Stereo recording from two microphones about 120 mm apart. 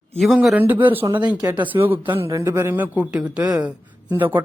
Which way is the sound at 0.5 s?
15° right (ahead or behind).